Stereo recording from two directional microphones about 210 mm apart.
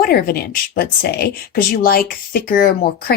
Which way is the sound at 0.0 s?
45° left (ahead or behind).